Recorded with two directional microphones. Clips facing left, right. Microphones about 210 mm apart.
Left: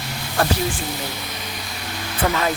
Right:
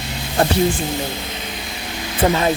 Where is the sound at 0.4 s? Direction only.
20° right (ahead or behind).